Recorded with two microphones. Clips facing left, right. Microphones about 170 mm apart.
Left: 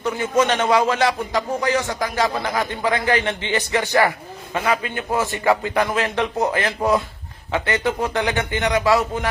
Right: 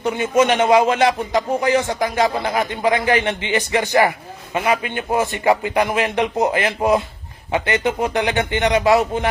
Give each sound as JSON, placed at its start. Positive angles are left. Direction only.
{"t": 0.0, "sound": "a man's voice", "side_deg": -20}